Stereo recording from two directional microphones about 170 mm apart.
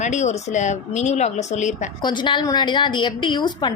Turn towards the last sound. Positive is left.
turn(degrees=25)  # may be behind; listen again after turning